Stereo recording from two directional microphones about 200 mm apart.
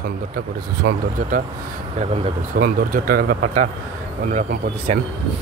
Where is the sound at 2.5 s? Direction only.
45° right (ahead or behind).